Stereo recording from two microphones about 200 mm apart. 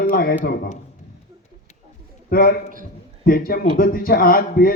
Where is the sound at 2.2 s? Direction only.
45° left (ahead or behind).